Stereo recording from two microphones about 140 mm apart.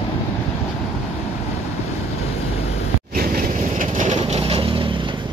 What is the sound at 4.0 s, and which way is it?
Vehicle, 60° right (ahead or behind).